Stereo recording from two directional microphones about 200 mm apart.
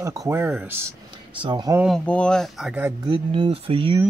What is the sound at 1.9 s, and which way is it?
Speech, 5° left (ahead or behind).